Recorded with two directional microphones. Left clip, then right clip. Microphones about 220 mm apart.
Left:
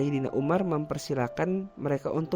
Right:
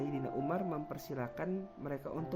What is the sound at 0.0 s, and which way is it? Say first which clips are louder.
Speech: left 9 dB; 45° left (ahead or behind).